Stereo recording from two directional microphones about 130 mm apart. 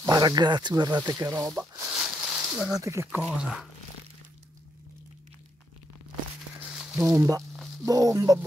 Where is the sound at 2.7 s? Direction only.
25° right (ahead or behind).